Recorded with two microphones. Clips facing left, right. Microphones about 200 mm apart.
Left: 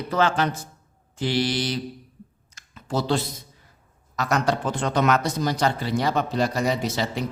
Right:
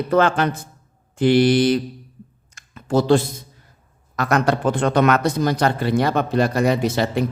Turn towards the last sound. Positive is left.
turn(degrees=-55)  # may be behind; listen again after turning